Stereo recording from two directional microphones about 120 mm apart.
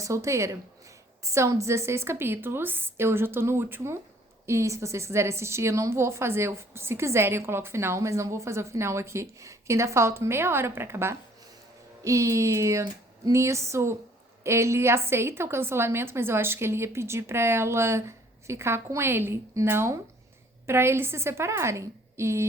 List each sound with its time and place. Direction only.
0.0 s speech: 25° right (ahead or behind)